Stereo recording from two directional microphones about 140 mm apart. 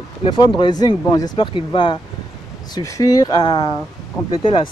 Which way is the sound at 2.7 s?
25° left (ahead or behind).